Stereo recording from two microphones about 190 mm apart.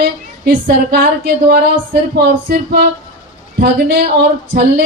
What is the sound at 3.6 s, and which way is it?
Speech, 65° right (ahead or behind).